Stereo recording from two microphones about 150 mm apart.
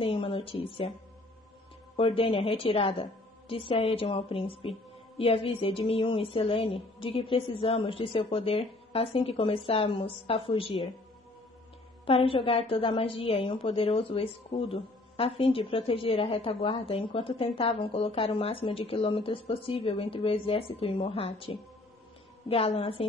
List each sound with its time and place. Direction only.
0.0 s a woman's voice: 35° left (ahead or behind)
2.0 s a woman's voice: 35° left (ahead or behind)
12.1 s a woman's voice: 35° left (ahead or behind)